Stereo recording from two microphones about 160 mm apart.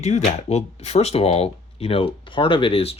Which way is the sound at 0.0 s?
45° left (ahead or behind).